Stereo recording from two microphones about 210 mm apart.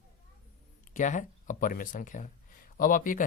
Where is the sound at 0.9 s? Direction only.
35° left (ahead or behind).